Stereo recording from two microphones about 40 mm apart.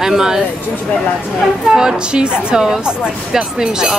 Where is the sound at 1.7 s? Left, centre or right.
Centre.